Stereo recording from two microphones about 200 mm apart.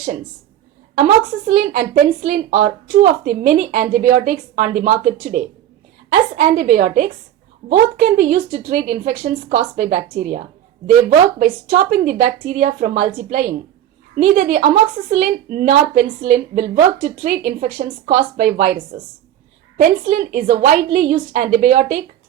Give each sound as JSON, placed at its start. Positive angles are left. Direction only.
{"t": 0.9, "sound": "a woman's voice", "side_deg": -40}
{"t": 11.7, "sound": "a woman's voice", "side_deg": -40}
{"t": 19.7, "sound": "a woman's voice", "side_deg": -40}